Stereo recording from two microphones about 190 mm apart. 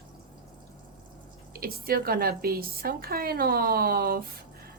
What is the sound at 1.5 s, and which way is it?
A woman's voice, 50° right (ahead or behind).